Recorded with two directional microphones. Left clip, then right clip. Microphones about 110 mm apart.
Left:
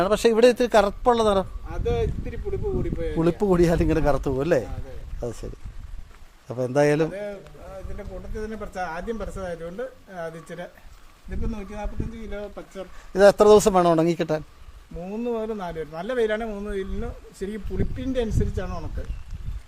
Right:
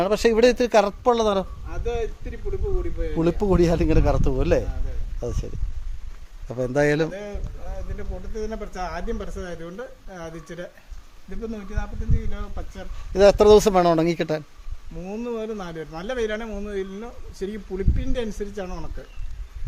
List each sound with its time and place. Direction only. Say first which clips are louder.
0.0 s speech: even; 5° right (ahead or behind)
1.6 s a sound: left 2 dB; 60° left (ahead or behind)
3.2 s speech: even; 5° left (ahead or behind)
6.5 s speech: even; 10° right (ahead or behind)
8.4 s speech: right 1 dB; 10° right (ahead or behind)
13.1 s speech: even; 15° right (ahead or behind)
15.2 s a man's voice: left 2 dB; 35° right (ahead or behind)